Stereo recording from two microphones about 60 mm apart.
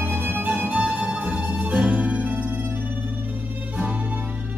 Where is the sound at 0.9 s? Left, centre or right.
Centre.